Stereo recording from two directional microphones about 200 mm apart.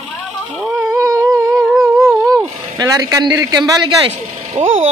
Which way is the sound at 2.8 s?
15° right (ahead or behind).